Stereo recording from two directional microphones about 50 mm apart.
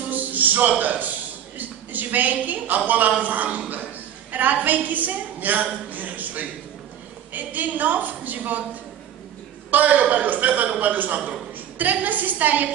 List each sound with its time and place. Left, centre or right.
0.1 s a sound: right
1.6 s a woman's voice: right
9.7 s a woman's voice: right